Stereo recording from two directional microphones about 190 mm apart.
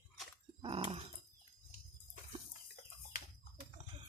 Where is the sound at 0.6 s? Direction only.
30° right (ahead or behind).